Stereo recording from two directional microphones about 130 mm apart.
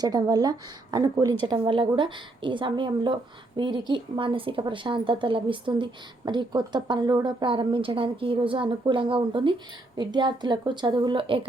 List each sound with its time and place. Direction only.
0.0 s a woman's voice: 30° right (ahead or behind)